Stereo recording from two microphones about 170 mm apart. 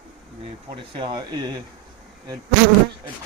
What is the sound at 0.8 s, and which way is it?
Speech, 30° right (ahead or behind).